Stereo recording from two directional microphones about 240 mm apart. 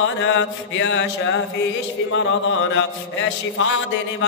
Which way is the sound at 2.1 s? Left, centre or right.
Left.